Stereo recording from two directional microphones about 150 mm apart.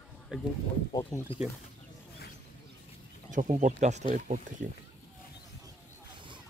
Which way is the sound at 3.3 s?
60° right (ahead or behind).